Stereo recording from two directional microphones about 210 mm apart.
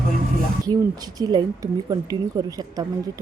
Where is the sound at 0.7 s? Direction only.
20° right (ahead or behind).